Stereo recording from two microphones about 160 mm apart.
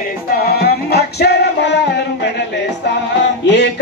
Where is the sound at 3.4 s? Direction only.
90° left.